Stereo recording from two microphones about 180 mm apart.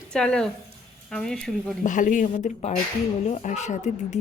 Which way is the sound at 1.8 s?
45° left (ahead or behind).